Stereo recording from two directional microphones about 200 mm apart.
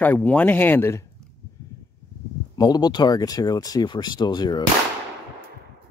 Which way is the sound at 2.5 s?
20° left (ahead or behind).